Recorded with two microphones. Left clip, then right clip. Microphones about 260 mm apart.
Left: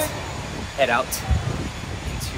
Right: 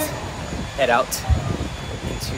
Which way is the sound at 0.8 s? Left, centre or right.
Centre.